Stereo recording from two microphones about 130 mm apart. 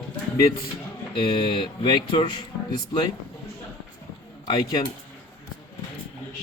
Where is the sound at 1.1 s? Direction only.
40° left (ahead or behind).